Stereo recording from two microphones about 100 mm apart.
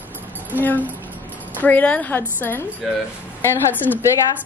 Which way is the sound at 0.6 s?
20° left (ahead or behind).